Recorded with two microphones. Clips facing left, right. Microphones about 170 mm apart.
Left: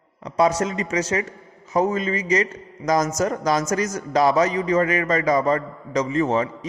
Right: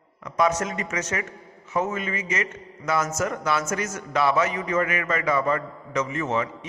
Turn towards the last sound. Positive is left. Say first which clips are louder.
# left 5 dB
turn(degrees=35)  # may be behind; listen again after turning